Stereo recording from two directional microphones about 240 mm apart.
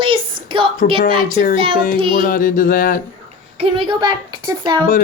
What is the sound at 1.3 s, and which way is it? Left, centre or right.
Speech, left.